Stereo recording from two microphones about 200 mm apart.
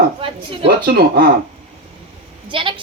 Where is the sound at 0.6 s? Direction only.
55° right (ahead or behind).